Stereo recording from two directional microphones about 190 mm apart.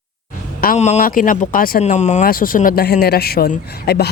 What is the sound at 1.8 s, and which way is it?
Speech, 35° left (ahead or behind).